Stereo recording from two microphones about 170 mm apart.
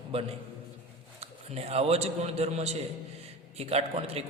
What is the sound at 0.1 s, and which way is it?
A man's voice, 35° right (ahead or behind).